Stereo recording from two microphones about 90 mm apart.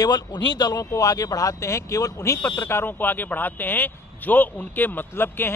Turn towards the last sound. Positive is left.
turn(degrees=25)  # may be behind; listen again after turning